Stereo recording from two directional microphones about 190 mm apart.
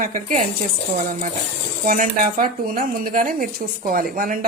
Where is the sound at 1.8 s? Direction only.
45° right (ahead or behind).